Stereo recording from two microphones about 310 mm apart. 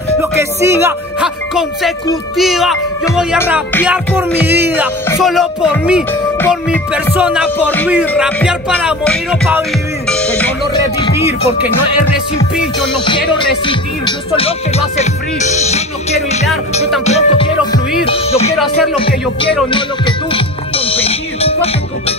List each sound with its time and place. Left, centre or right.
0.2 s speech: centre
10.0 s music: centre
11.0 s music: centre
13.0 s music: centre
15.5 s music: left
17.0 s music: centre
19.7 s speech: centre